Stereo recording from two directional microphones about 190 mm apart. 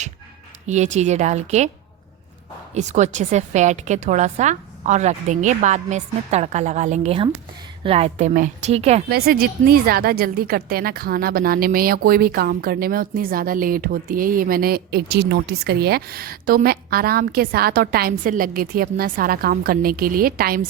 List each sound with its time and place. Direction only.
0.7 s a woman's voice: 40° right (ahead or behind)
2.7 s a woman's voice: 35° right (ahead or behind)
9.0 s a woman's voice: 55° right (ahead or behind)